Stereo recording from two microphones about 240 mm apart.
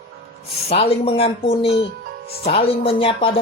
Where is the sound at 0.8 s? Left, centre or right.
Left.